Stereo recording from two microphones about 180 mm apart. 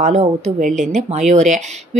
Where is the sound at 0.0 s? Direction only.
40° right (ahead or behind).